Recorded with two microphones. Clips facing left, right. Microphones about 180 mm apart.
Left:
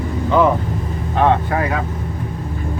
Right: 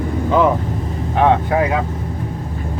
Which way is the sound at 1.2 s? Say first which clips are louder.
Right 2 dB; 15° right (ahead or behind).